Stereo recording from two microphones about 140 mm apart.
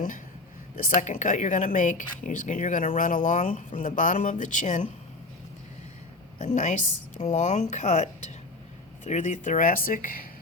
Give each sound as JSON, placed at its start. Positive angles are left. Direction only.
{"t": 0.9, "sound": "speech", "side_deg": 65}
{"t": 6.4, "sound": "speech", "side_deg": 60}